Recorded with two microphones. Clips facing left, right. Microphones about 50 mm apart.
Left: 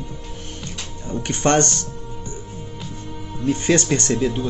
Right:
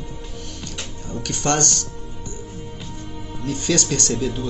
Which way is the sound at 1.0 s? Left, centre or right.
Left.